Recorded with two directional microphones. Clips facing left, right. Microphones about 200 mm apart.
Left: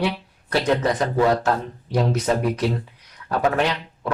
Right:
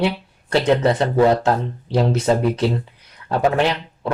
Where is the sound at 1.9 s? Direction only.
30° right (ahead or behind).